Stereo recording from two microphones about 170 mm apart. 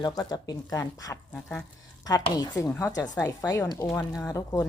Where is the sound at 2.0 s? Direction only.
20° left (ahead or behind).